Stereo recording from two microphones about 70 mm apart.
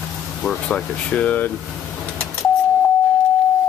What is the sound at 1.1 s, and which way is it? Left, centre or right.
Speech, left.